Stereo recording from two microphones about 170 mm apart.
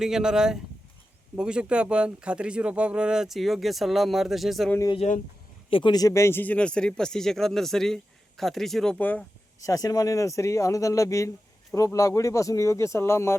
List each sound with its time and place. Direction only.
0.0 s speech: 5° right (ahead or behind)
5.0 s speech: 40° left (ahead or behind)
5.7 s speech: 25° left (ahead or behind)